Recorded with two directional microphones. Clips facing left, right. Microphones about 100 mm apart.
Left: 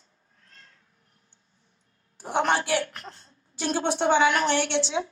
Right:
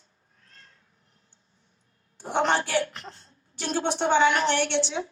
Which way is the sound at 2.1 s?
15° left (ahead or behind).